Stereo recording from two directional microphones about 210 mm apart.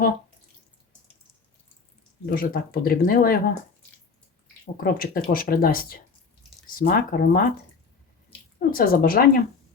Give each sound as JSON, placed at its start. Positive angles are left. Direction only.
{"t": 2.2, "sound": "speech", "side_deg": 45}
{"t": 4.6, "sound": "speech", "side_deg": 45}
{"t": 8.5, "sound": "speech", "side_deg": 45}